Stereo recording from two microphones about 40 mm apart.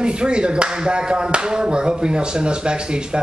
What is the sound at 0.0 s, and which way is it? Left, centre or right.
Speech, right.